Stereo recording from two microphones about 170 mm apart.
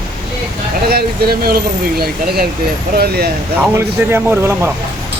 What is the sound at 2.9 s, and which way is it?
Speech, 65° right (ahead or behind).